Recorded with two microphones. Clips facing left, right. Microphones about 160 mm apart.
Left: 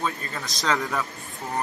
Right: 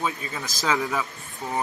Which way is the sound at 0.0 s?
5° right (ahead or behind).